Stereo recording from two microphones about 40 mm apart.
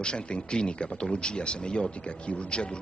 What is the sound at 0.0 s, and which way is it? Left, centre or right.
Speech, left.